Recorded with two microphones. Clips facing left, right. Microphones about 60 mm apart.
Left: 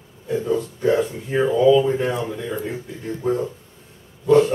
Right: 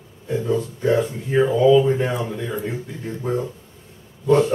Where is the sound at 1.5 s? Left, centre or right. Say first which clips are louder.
Even; centre.